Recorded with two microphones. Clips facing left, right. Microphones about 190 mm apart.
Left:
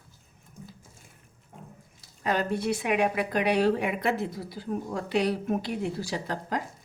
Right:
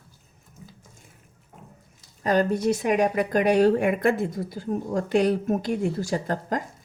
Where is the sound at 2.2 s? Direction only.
40° right (ahead or behind).